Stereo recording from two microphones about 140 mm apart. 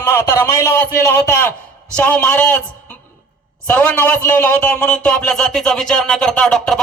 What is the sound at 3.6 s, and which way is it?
A man's voice, 10° left (ahead or behind).